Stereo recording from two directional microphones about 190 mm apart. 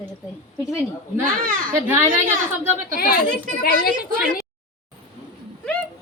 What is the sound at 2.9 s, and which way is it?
Speech, 50° left (ahead or behind).